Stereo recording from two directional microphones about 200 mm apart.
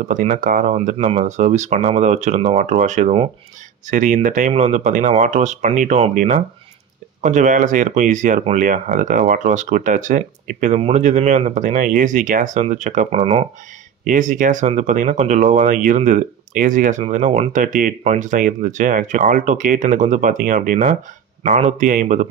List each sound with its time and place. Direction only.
0.1 s speech: 40° right (ahead or behind)
0.7 s speech: 35° right (ahead or behind)
14.0 s speech: 40° right (ahead or behind)